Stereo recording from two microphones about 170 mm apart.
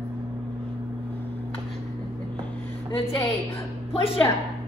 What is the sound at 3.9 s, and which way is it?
Speech, 35° left (ahead or behind).